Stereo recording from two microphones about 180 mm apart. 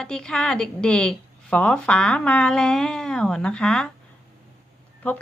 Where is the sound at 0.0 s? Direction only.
5° left (ahead or behind).